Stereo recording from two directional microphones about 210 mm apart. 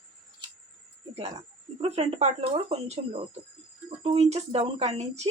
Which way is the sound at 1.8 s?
30° right (ahead or behind).